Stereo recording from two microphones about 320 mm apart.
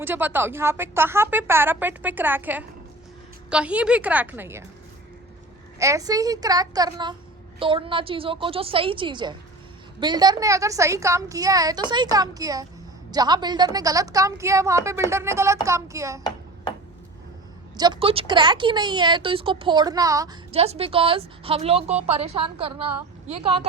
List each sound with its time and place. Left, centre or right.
0.0 s a woman's voice: centre
5.8 s speech: centre
17.7 s speech: centre